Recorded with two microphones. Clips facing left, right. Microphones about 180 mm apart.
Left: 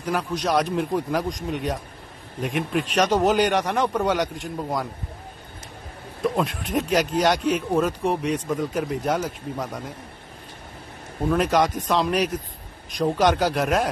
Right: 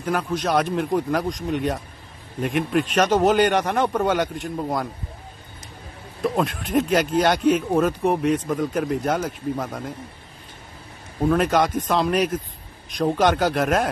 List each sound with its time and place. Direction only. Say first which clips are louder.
0.0 s a man's voice: right 1 dB; centre (ahead or behind)
6.2 s a man's voice: right 1 dB; centre (ahead or behind)
11.2 s a man's voice: right 1 dB; centre (ahead or behind)